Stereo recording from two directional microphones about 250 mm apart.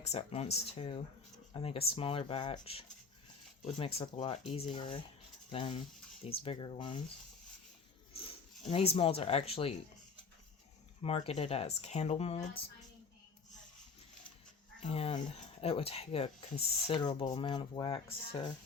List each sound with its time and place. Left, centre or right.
0.0 s speech: left
8.2 s speech: left
11.0 s speech: left
14.8 s speech: left